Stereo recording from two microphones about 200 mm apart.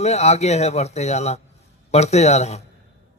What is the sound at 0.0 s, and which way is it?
A man's voice, 35° left (ahead or behind).